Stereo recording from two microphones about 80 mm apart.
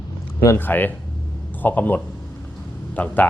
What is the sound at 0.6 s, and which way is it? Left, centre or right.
Speech, left.